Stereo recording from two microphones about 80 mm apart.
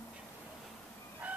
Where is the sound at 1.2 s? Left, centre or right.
Centre.